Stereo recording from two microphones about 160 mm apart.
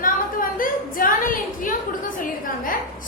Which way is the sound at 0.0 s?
60° left (ahead or behind).